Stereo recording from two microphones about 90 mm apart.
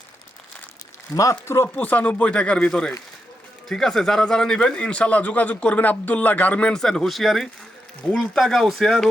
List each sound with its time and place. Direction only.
1.1 s speech: 35° left (ahead or behind)
1.7 s a man's voice: 20° left (ahead or behind); by 9.0 s centre (ahead or behind)